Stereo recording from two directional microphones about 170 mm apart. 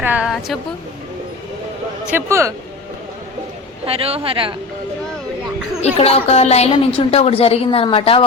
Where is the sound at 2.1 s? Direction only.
15° right (ahead or behind).